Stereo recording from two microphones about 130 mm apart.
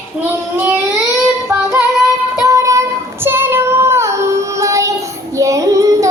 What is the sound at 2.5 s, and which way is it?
Child singing, 25° right (ahead or behind).